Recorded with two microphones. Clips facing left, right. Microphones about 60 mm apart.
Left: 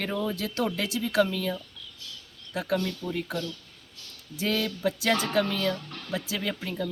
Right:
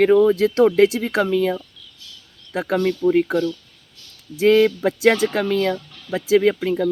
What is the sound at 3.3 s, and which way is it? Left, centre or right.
Speech, right.